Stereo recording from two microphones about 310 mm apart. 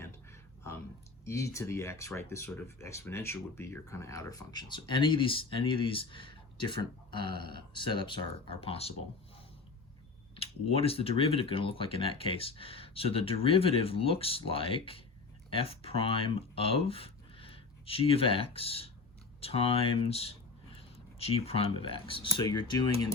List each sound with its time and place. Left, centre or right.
1.2 s speech: centre
10.3 s speech: centre
21.3 s speech: centre